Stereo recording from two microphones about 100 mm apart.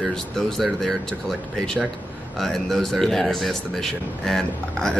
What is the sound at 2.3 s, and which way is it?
A man's voice, centre (ahead or behind).